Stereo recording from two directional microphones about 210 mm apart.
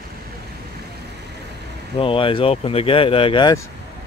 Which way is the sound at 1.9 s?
25° left (ahead or behind).